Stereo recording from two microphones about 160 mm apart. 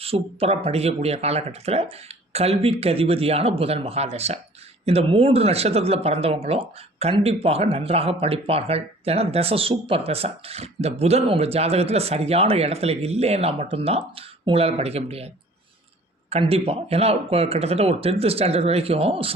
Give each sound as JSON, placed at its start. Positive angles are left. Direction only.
{"t": 0.0, "sound": "speech", "side_deg": -35}
{"t": 16.3, "sound": "speech", "side_deg": -40}